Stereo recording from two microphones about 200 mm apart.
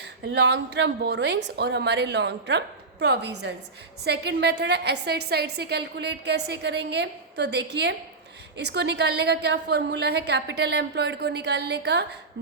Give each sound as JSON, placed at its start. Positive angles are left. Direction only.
{"t": 0.0, "sound": "a woman's voice", "side_deg": -60}